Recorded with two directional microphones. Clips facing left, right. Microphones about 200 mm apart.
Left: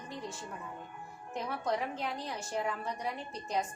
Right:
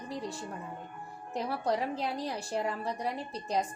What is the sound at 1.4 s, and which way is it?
A woman's voice, 35° right (ahead or behind).